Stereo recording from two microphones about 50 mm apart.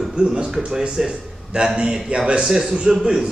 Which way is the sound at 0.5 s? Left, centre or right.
Centre.